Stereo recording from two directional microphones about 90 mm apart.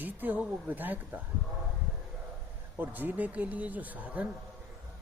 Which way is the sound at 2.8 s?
20° right (ahead or behind).